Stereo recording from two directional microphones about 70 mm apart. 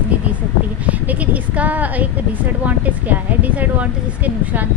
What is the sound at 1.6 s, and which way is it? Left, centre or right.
Speech, right.